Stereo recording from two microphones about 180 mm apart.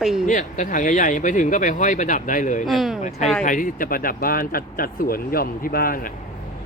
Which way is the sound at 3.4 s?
45° left (ahead or behind).